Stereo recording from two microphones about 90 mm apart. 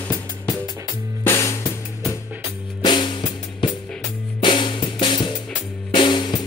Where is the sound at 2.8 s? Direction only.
60° left (ahead or behind).